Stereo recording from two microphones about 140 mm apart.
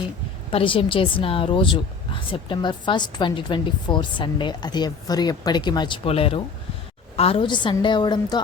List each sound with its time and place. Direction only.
0.5 s a woman's voice: 40° left (ahead or behind)
6.1 s a woman's voice: 45° left (ahead or behind)